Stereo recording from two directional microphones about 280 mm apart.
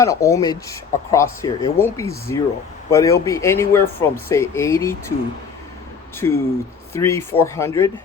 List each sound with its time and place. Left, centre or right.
0.0 s speech: centre
6.1 s speech: centre